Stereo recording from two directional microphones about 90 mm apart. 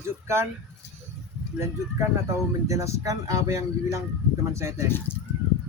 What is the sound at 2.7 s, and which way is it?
Speech, 35° right (ahead or behind).